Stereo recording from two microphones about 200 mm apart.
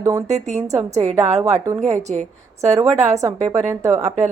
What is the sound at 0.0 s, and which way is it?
Speech, 15° right (ahead or behind).